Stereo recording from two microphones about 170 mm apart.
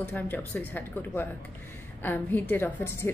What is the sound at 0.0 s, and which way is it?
A woman's voice, 10° left (ahead or behind).